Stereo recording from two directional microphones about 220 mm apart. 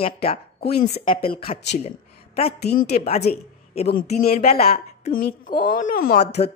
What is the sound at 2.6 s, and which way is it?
Speech, 45° left (ahead or behind).